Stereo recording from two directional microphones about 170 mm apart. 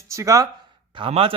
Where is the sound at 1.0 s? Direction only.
35° right (ahead or behind).